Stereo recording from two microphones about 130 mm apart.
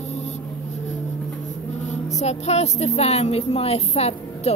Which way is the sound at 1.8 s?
60° left (ahead or behind).